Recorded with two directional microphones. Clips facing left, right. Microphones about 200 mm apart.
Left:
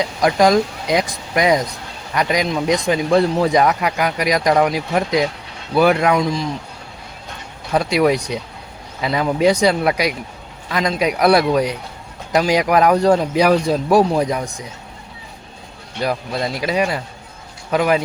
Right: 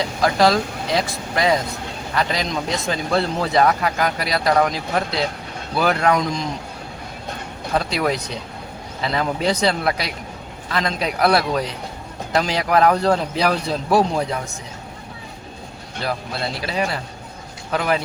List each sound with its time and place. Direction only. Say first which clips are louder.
0.2 s speech: left 3 dB; 15° left (ahead or behind)
7.7 s speech: left 5 dB; 10° left (ahead or behind)
16.0 s speech: left 4 dB; 15° left (ahead or behind)